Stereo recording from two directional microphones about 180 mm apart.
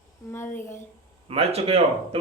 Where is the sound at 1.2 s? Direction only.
35° right (ahead or behind).